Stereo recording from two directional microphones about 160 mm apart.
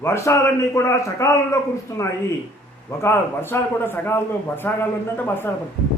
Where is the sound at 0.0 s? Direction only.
20° left (ahead or behind).